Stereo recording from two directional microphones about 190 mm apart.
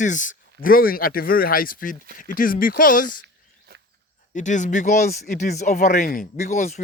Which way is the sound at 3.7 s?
50° right (ahead or behind).